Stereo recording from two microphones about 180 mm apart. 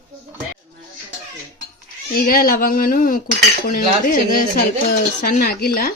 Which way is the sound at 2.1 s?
55° left (ahead or behind).